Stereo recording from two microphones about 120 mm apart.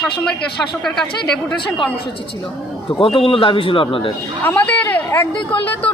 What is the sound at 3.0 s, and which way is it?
Speech, 50° left (ahead or behind).